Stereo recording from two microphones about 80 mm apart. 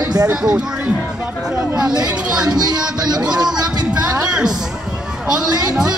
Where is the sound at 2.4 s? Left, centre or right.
Right.